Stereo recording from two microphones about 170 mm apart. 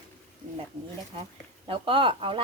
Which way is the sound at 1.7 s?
30° right (ahead or behind).